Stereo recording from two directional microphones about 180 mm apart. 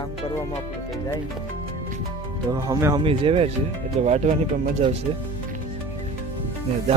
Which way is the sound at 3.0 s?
30° right (ahead or behind).